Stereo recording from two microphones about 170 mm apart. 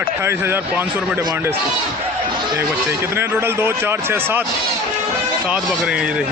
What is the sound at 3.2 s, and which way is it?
Speech, 15° right (ahead or behind).